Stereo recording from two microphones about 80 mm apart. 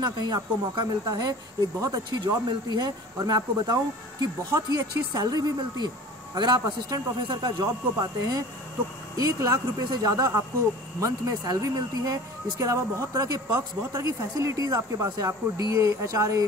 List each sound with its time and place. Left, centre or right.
0.0 s speech: right